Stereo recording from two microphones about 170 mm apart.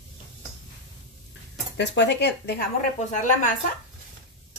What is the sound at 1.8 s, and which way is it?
Speech, 90° left.